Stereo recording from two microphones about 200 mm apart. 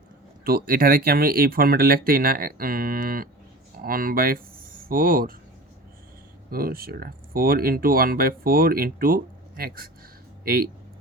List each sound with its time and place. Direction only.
0.4 s speech: 50° right (ahead or behind)
6.5 s speech: 50° right (ahead or behind)